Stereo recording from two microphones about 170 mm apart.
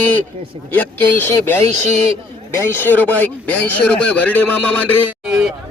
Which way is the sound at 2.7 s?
10° left (ahead or behind).